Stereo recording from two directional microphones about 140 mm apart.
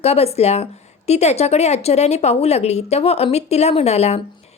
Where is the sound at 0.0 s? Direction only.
50° left (ahead or behind).